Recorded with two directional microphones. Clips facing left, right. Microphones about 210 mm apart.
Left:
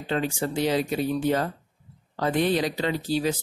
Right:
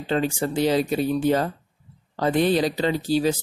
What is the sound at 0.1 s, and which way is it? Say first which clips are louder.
Speech: right 3 dB; 30° right (ahead or behind).